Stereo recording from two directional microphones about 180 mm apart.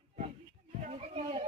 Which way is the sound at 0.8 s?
35° right (ahead or behind).